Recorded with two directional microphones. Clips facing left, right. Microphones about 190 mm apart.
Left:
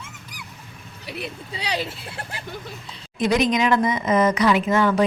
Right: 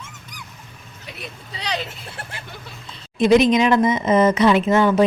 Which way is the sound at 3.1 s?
25° right (ahead or behind).